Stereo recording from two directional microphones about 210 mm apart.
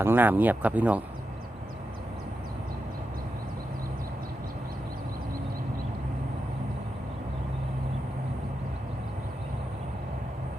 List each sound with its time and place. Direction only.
0.0 s speech: 10° right (ahead or behind)